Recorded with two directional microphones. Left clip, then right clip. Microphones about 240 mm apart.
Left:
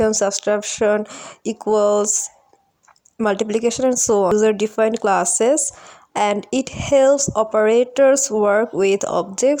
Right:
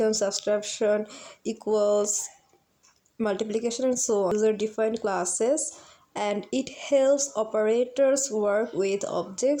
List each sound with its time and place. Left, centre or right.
0.0 s speech: left